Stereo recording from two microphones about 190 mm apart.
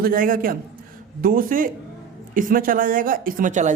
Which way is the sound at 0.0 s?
50° right (ahead or behind).